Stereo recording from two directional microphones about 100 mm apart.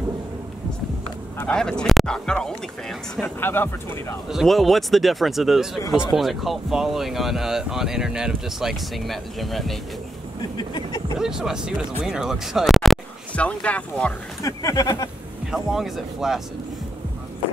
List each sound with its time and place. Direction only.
1.5 s speech: 10° left (ahead or behind)
3.3 s speech: 20° left (ahead or behind)
4.3 s speech: centre (ahead or behind)
10.6 s speech: 50° left (ahead or behind)
11.1 s speech: 5° right (ahead or behind)
13.4 s speech: 15° left (ahead or behind)
14.4 s speech: 35° left (ahead or behind)
15.5 s speech: 5° right (ahead or behind)